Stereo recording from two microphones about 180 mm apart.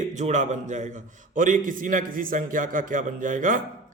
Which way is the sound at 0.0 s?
40° right (ahead or behind).